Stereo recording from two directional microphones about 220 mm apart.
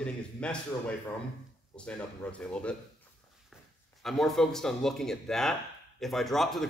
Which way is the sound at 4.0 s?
Centre (ahead or behind).